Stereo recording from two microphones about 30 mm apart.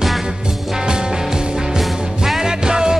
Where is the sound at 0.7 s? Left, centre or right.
Right.